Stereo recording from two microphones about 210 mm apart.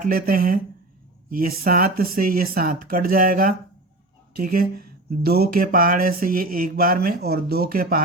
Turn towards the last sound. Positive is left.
turn(degrees=-45)  # may be behind; listen again after turning